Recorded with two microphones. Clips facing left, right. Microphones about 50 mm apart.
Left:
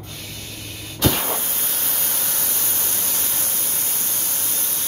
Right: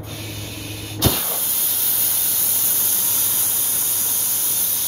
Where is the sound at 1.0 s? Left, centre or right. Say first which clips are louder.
Left 2 dB; left.